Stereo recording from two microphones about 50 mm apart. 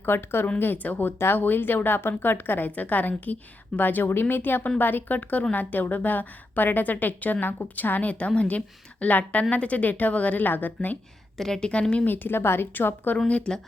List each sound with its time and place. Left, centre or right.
0.0 s a woman's voice: left
0.6 s a woman's voice: left
11.3 s a woman's voice: centre
11.7 s speech: left
12.0 s a woman's voice: left
13.2 s speech: left